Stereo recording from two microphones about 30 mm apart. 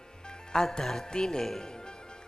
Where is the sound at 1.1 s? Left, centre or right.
Left.